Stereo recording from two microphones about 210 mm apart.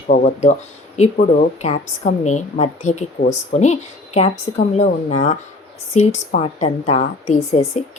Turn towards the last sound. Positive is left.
turn(degrees=30)  # may be behind; listen again after turning